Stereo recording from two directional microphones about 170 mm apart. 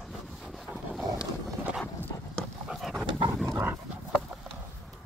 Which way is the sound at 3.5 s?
10° right (ahead or behind).